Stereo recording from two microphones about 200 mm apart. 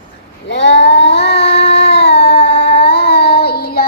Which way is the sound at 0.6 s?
60° left (ahead or behind).